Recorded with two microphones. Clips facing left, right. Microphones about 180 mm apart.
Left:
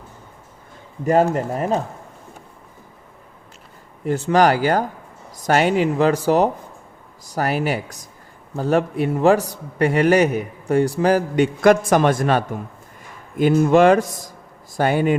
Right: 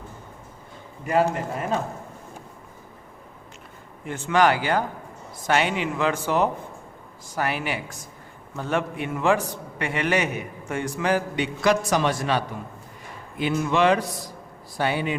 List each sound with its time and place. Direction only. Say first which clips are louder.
1.0 s a man's voice: left 5 dB; 40° left (ahead or behind)
4.0 s a man's voice: left 5 dB; 35° left (ahead or behind)